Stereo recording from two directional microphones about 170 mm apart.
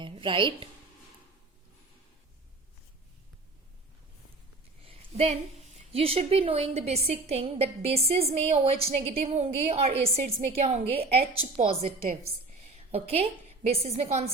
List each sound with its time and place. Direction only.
0.0 s speech: 30° right (ahead or behind)
4.9 s a sound: 35° right (ahead or behind)
5.6 s a woman's voice: 35° right (ahead or behind)